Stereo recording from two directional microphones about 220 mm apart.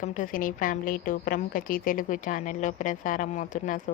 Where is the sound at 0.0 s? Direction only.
35° left (ahead or behind).